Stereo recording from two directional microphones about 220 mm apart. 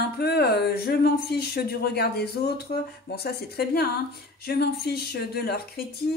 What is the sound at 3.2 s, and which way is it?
A woman's voice, 45° left (ahead or behind).